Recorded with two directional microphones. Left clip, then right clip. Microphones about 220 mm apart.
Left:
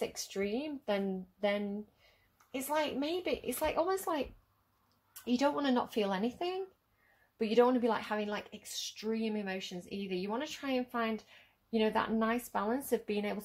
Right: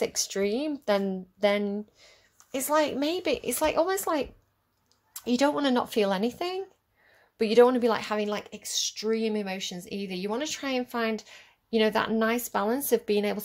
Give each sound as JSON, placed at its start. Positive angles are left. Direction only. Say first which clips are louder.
{"t": 0.0, "sound": "speech", "louder": "right 9 dB", "side_deg": -40}